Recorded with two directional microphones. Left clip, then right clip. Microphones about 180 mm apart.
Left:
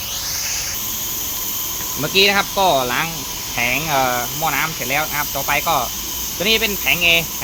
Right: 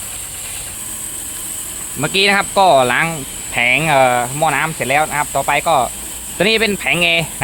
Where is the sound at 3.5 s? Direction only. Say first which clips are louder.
Right 6 dB; 70° right (ahead or behind).